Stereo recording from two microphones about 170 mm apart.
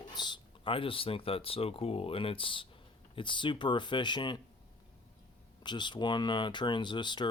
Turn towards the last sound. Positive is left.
turn(degrees=25)  # may be behind; listen again after turning